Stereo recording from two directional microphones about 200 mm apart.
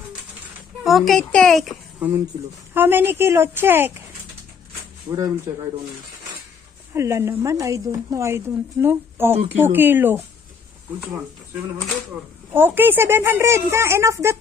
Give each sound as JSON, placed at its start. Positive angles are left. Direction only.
{"t": 0.8, "sound": "a child's voice", "side_deg": 0}
{"t": 5.1, "sound": "speech", "side_deg": -15}
{"t": 6.9, "sound": "speech", "side_deg": -15}
{"t": 12.5, "sound": "speech", "side_deg": -10}